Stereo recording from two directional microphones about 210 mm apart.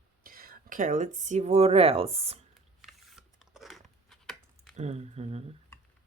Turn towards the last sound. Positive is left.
turn(degrees=-30)  # may be behind; listen again after turning